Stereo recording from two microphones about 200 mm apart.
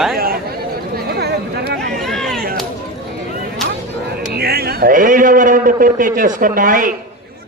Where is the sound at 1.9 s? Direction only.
Centre (ahead or behind).